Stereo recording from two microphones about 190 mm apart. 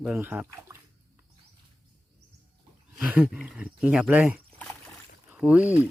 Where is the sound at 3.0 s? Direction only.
5° right (ahead or behind).